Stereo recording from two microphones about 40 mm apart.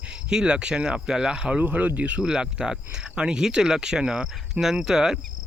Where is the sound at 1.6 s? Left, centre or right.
Right.